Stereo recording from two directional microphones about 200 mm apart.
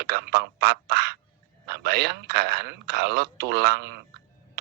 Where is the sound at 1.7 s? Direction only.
55° right (ahead or behind).